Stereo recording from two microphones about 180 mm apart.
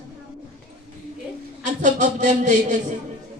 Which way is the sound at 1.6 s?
45° right (ahead or behind).